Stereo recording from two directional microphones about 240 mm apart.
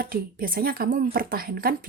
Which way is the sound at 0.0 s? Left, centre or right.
Right.